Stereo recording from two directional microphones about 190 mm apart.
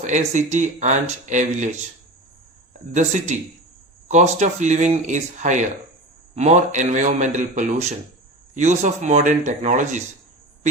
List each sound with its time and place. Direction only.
0.0 s speech: 40° right (ahead or behind)
2.9 s speech: 40° right (ahead or behind)